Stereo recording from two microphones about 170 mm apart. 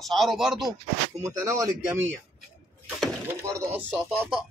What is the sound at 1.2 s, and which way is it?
Speech, 15° right (ahead or behind).